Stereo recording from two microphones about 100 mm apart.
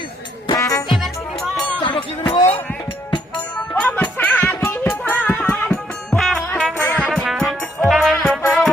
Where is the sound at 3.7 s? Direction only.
15° left (ahead or behind).